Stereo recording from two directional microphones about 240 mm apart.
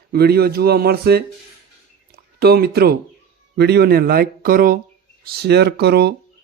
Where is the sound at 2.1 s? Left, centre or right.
Right.